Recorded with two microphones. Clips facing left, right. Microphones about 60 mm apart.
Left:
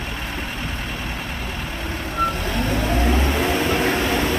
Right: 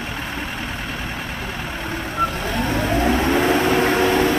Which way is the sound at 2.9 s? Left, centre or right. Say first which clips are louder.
Right 5 dB; centre.